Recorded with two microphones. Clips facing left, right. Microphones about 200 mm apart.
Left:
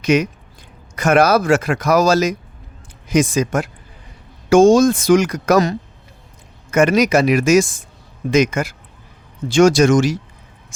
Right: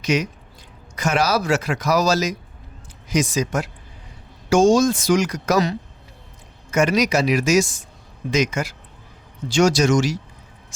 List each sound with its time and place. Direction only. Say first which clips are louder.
0.0 s speech: left 6 dB; 55° left (ahead or behind)